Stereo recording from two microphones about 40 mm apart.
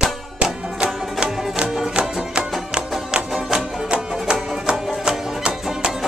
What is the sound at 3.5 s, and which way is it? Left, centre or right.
Music, right.